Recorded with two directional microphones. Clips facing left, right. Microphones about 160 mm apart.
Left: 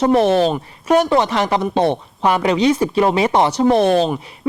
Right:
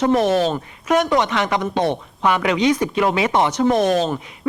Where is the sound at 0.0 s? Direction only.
30° left (ahead or behind).